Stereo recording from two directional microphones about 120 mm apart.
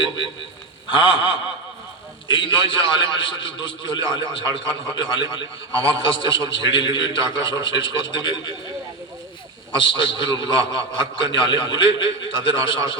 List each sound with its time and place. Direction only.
0.9 s a man's voice: 45° left (ahead or behind)
9.7 s a man's voice: 40° left (ahead or behind)